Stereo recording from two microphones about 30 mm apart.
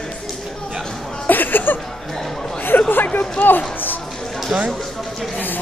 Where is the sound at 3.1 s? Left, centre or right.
Left.